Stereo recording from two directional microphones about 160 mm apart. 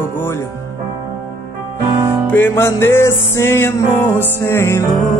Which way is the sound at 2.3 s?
15° left (ahead or behind).